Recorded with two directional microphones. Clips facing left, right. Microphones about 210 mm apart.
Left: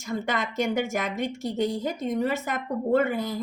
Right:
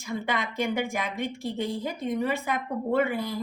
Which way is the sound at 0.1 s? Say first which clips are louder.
Left 2 dB; 45° left (ahead or behind).